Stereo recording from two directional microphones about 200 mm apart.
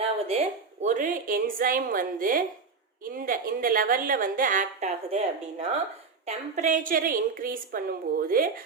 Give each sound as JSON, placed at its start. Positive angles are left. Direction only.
{"t": 0.0, "sound": "a woman's voice", "side_deg": -30}